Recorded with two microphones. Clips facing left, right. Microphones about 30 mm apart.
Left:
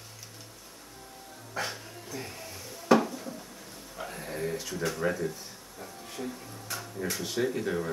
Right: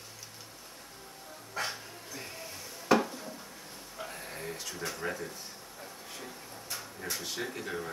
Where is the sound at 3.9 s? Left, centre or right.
Centre.